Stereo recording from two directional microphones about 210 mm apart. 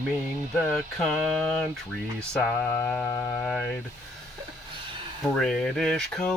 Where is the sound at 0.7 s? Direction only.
Centre (ahead or behind).